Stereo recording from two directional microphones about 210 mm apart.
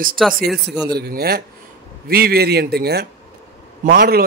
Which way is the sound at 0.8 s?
50° right (ahead or behind).